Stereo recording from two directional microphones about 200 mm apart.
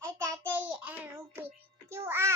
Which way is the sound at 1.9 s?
10° right (ahead or behind).